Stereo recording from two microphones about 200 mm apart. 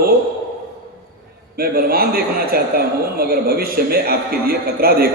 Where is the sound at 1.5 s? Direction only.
50° right (ahead or behind).